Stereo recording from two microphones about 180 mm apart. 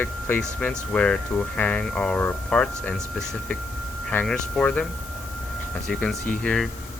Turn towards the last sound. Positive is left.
turn(degrees=5)  # may be behind; listen again after turning